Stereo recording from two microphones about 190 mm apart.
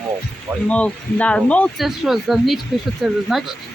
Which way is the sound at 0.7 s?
5° left (ahead or behind).